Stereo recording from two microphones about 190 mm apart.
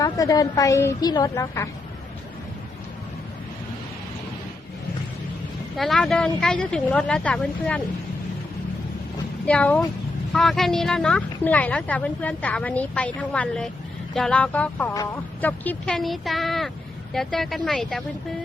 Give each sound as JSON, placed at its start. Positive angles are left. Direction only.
{"t": 0.0, "sound": "a woman's voice", "side_deg": 20}
{"t": 5.7, "sound": "speech", "side_deg": 0}
{"t": 9.5, "sound": "a woman's voice", "side_deg": 5}